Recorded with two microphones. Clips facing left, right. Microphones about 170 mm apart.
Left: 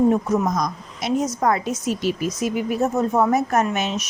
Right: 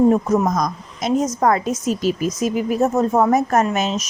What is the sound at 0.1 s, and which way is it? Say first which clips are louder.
A woman's voice: right 3 dB; 45° right (ahead or behind).